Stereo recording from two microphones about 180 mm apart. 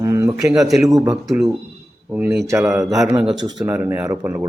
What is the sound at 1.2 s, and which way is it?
A man's voice, centre (ahead or behind).